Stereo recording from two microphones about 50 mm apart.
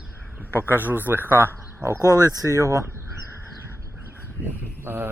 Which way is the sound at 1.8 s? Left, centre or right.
Right.